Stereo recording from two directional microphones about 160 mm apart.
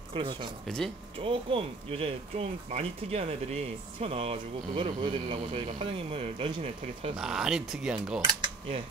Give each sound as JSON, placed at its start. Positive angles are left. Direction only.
{"t": 0.1, "sound": "speech", "side_deg": -30}
{"t": 0.7, "sound": "speech", "side_deg": 5}
{"t": 1.2, "sound": "speech", "side_deg": -35}
{"t": 7.2, "sound": "speech", "side_deg": -5}